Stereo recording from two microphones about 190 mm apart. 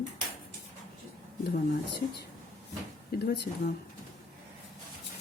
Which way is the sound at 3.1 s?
55° left (ahead or behind).